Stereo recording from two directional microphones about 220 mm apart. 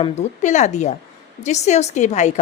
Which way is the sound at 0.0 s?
30° left (ahead or behind).